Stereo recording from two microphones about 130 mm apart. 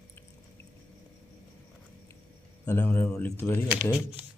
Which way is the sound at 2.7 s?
15° left (ahead or behind).